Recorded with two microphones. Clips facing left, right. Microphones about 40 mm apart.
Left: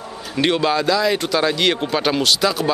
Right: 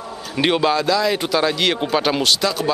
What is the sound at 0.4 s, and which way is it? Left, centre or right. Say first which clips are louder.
Speech: even; centre.